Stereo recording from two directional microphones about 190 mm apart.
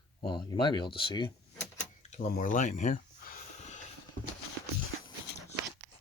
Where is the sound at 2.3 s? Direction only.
45° left (ahead or behind).